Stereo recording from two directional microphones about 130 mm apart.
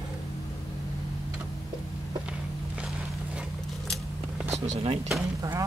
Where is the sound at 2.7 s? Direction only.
10° right (ahead or behind).